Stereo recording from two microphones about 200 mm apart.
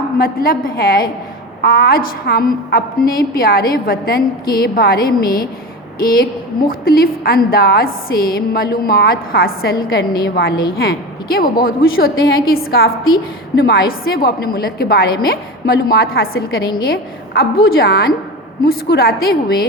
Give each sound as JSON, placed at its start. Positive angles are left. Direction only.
{"t": 0.2, "sound": "a woman's voice", "side_deg": 45}